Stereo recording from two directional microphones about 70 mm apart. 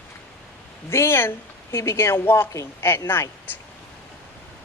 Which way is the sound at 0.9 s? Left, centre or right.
Left.